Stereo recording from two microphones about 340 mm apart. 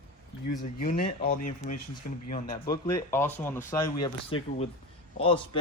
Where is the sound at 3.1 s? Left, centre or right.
Centre.